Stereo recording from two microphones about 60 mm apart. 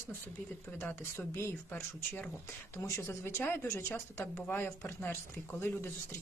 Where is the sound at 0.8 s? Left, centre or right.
Left.